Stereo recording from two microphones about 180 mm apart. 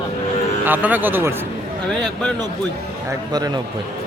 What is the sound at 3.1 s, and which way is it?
Speech, 20° right (ahead or behind).